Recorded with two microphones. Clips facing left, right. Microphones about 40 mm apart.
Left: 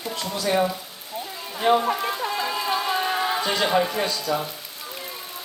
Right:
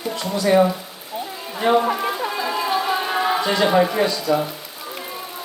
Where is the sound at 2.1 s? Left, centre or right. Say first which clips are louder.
Right 3 dB; centre.